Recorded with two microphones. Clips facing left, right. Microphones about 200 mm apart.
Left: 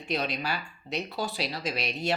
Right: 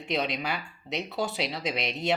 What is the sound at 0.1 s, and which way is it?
Speech, 20° right (ahead or behind).